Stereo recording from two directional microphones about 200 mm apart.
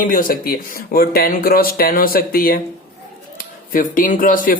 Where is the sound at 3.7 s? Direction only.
40° left (ahead or behind).